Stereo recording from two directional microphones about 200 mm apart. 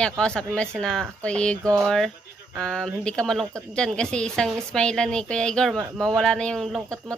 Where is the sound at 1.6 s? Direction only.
15° right (ahead or behind).